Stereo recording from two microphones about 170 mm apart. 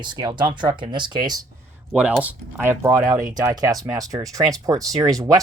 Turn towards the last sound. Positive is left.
turn(degrees=-20)  # may be behind; listen again after turning